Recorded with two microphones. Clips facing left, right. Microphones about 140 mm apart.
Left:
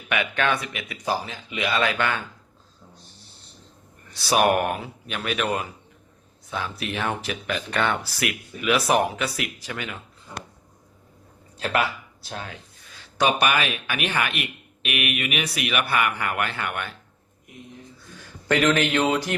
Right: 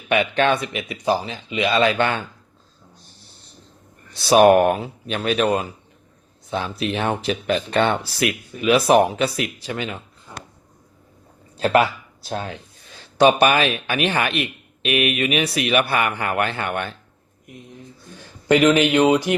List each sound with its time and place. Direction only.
0.1 s speech: 30° right (ahead or behind)
4.1 s speech: 25° right (ahead or behind)
11.6 s speech: 30° right (ahead or behind)
18.4 s speech: 15° right (ahead or behind)